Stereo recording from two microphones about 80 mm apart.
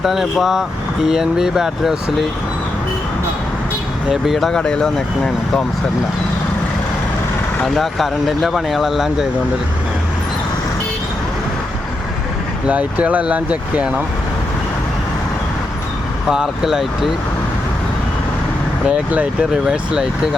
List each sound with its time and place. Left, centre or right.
0.0 s speech: centre
4.1 s speech: centre
7.6 s speech: centre
12.6 s speech: centre
16.3 s speech: centre
18.9 s speech: centre